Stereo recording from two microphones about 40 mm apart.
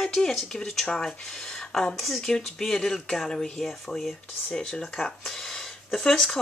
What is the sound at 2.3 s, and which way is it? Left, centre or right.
Speech, centre.